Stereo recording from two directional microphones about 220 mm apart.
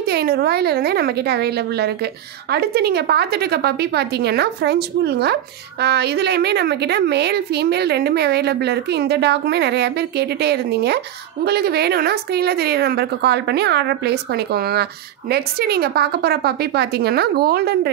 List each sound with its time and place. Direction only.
0.0 s a woman's voice: 45° right (ahead or behind)